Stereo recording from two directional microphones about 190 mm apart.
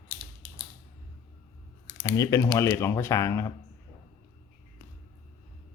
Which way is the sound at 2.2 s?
15° left (ahead or behind).